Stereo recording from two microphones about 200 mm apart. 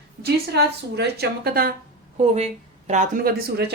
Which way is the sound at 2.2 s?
30° right (ahead or behind).